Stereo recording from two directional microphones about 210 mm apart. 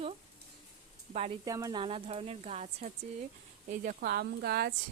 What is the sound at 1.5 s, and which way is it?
A woman's voice, 15° right (ahead or behind).